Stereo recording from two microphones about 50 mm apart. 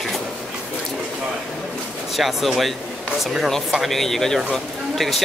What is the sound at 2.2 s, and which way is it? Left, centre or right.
Speech, centre.